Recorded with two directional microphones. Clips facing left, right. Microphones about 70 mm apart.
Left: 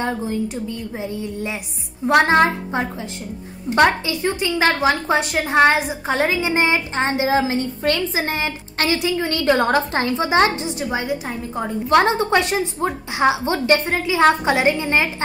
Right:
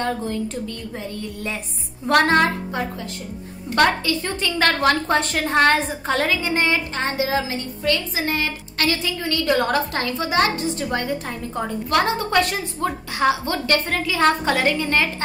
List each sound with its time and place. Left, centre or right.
0.0 s a woman's voice: centre
10.9 s a woman's voice: centre
11.9 s a woman's voice: left